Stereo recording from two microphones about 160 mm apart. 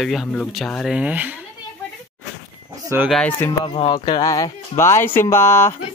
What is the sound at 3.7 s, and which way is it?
Speech, 30° left (ahead or behind).